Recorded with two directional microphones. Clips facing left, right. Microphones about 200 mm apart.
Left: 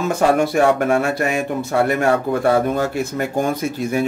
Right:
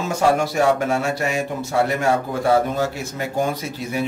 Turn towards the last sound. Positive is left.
turn(degrees=50)  # may be behind; listen again after turning